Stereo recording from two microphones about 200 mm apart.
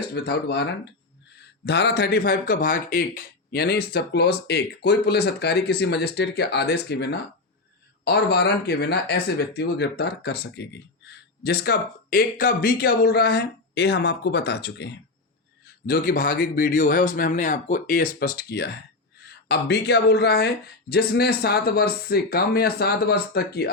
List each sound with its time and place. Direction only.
0.2 s speech: 55° left (ahead or behind)